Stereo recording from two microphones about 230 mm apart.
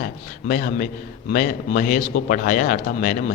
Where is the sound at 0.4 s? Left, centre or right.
Left.